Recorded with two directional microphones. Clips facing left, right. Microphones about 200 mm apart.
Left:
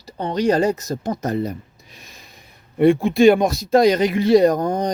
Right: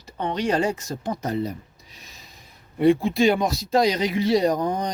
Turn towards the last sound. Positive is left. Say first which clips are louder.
# left 5 dB
turn(degrees=45)  # may be behind; listen again after turning